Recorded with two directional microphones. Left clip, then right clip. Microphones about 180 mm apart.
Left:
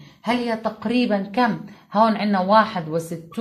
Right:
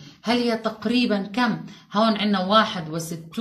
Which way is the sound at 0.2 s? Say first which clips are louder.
Even; 45° left (ahead or behind).